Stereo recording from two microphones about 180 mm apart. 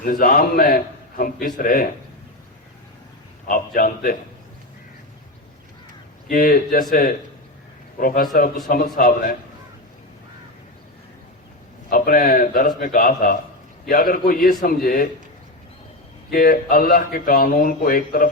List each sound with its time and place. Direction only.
0.0 s speech: 50° left (ahead or behind)
3.4 s speech: 50° left (ahead or behind)
6.2 s speech: 55° left (ahead or behind)
7.9 s speech: 50° left (ahead or behind)
11.9 s speech: 55° left (ahead or behind)
16.3 s speech: 50° left (ahead or behind)